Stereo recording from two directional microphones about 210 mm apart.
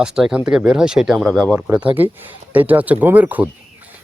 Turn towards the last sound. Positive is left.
turn(degrees=-10)  # may be behind; listen again after turning